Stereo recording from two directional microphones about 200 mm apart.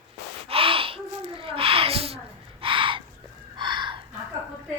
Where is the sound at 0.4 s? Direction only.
30° right (ahead or behind).